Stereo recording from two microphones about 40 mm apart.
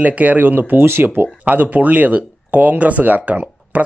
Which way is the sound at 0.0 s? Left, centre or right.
Right.